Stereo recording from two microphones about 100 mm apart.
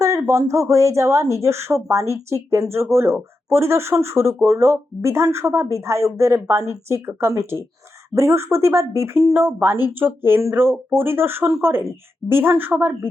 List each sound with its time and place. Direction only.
0.0 s speech: 30° right (ahead or behind)